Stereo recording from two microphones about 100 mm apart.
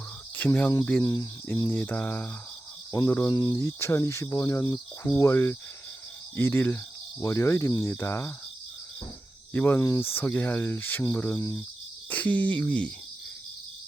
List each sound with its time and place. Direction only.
0.3 s cricket: 15° left (ahead or behind)
1.0 s speech: 35° left (ahead or behind)
1.7 s speech: 15° left (ahead or behind)
2.9 s speech: 30° left (ahead or behind)
3.2 s speech: 45° left (ahead or behind)
3.5 s speech: 30° left (ahead or behind)
9.5 s speech: 20° left (ahead or behind)
11.3 s speech: 35° left (ahead or behind)
12.0 s speech: 15° left (ahead or behind)